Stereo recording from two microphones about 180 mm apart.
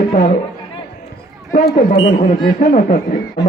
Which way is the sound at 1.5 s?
50° left (ahead or behind).